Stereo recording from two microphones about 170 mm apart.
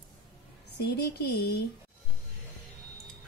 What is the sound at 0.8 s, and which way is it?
Speech, 70° left (ahead or behind).